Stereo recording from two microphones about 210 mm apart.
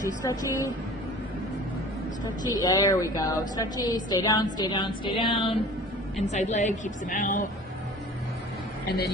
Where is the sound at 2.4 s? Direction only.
15° left (ahead or behind); by 7.5 s 40° left (ahead or behind).